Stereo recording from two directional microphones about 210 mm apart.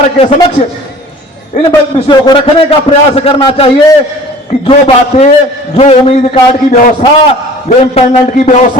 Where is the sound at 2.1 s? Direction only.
25° left (ahead or behind).